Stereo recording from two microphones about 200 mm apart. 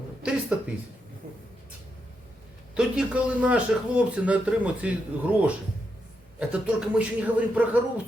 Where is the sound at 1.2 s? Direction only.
40° right (ahead or behind).